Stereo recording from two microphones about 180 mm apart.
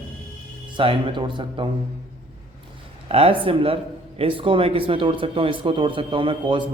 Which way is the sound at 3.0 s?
30° right (ahead or behind).